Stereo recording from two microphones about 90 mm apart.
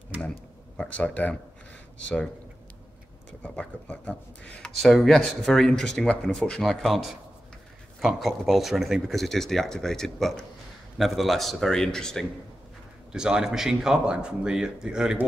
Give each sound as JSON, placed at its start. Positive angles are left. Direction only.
{"t": 0.7, "sound": "speech", "side_deg": 15}
{"t": 3.8, "sound": "speech", "side_deg": 15}
{"t": 13.1, "sound": "speech", "side_deg": -10}